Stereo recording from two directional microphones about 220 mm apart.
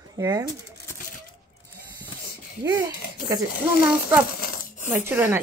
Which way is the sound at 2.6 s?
15° right (ahead or behind).